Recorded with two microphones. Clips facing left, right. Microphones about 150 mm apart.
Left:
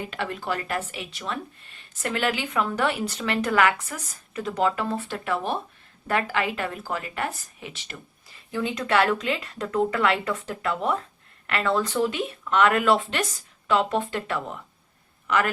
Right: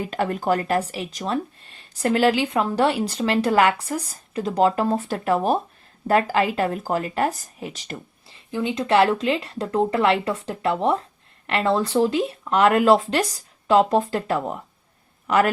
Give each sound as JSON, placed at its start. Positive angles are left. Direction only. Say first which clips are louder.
{"t": 0.1, "sound": "speech", "louder": "right 7 dB", "side_deg": -40}
{"t": 8.3, "sound": "speech", "louder": "right 3 dB", "side_deg": -25}